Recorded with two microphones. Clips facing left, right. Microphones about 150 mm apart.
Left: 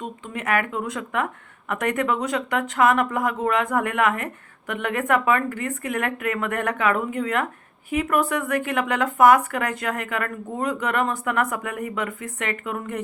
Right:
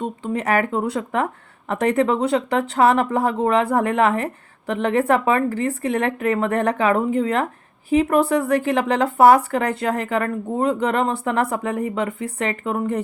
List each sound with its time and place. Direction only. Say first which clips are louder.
0.0 s speech: right 7 dB; 35° right (ahead or behind)